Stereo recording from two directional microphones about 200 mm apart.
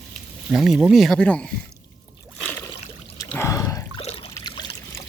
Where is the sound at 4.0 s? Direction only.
30° left (ahead or behind).